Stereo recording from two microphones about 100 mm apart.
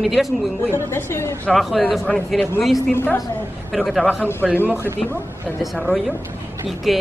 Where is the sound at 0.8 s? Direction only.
25° left (ahead or behind).